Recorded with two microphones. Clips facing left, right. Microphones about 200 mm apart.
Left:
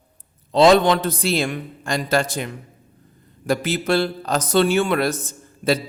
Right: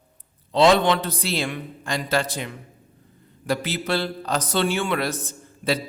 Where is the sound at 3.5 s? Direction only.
45° left (ahead or behind).